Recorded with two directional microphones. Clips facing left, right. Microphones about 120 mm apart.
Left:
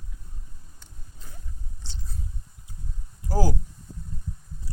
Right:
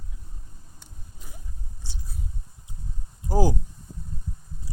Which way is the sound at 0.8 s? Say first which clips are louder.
Right 2 dB; 15° right (ahead or behind).